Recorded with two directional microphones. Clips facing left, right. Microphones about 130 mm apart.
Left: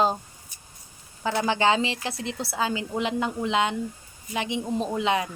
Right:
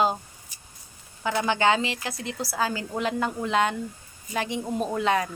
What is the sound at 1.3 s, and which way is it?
A woman's voice, 30° left (ahead or behind).